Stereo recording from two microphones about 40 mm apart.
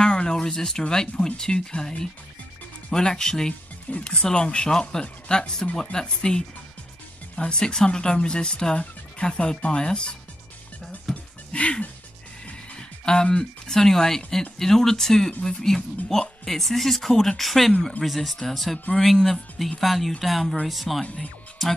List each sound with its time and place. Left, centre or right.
0.0 s speech: left
11.1 s music: centre
11.5 s music: left
13.0 s speech: centre